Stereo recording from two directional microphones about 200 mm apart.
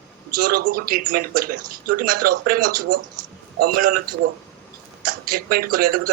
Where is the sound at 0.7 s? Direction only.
45° right (ahead or behind).